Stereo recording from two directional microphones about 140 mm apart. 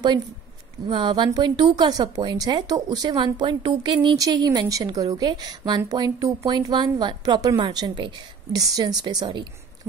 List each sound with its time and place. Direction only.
0.8 s a woman's voice: 30° right (ahead or behind)